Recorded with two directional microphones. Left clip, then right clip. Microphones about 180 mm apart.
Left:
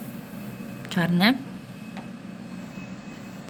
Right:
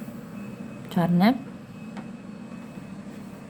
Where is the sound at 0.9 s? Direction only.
15° right (ahead or behind).